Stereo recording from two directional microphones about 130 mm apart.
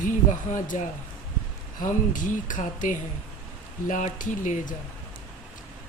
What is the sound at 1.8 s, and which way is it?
Speech, 90° left.